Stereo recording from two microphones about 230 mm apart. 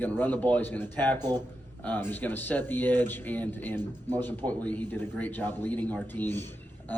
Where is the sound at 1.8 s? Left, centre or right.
Centre.